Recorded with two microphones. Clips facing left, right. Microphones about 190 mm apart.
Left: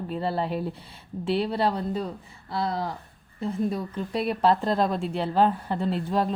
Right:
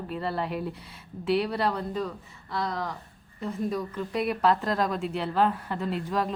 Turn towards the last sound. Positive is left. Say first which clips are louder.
# left 3 dB
turn(degrees=30)  # may be behind; listen again after turning